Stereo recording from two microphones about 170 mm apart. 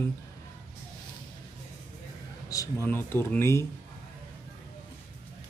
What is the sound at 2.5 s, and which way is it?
Speech, 20° left (ahead or behind).